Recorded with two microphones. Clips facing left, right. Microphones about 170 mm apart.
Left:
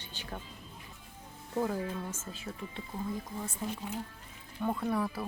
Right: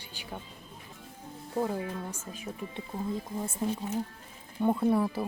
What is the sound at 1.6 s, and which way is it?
Speech, 15° right (ahead or behind).